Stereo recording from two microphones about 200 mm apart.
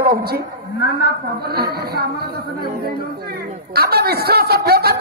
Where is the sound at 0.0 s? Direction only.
50° right (ahead or behind).